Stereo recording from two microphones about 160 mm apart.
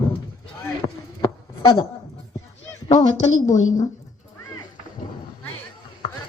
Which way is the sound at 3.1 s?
50° left (ahead or behind).